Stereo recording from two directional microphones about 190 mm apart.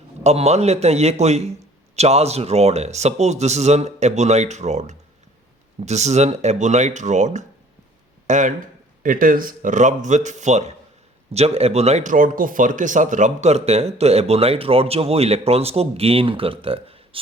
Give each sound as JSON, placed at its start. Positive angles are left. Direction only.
{"t": 0.2, "sound": "speech", "side_deg": -35}